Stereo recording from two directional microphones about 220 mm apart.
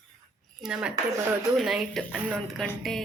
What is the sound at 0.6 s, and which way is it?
Speech, 5° right (ahead or behind).